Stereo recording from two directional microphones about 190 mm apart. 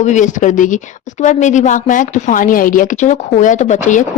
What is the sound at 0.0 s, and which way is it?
A woman's voice, 40° left (ahead or behind).